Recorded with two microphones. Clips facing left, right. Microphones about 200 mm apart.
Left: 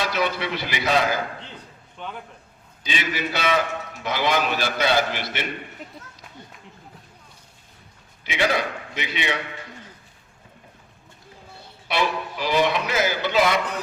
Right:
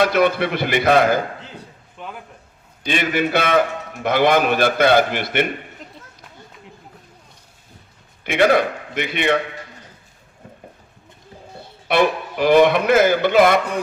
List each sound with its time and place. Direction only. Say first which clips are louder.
0.0 s a man's voice: right 8 dB; 55° right (ahead or behind)
1.4 s a sound: right 3 dB; 5° right (ahead or behind)
2.8 s a man's voice: right 8 dB; 55° right (ahead or behind)
8.2 s a man's voice: right 8 dB; 55° right (ahead or behind)
11.9 s a man's voice: right 7 dB; 55° right (ahead or behind)